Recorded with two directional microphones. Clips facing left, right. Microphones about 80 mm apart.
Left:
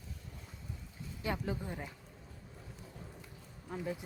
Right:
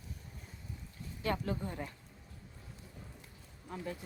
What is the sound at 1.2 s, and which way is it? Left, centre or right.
Speech, centre.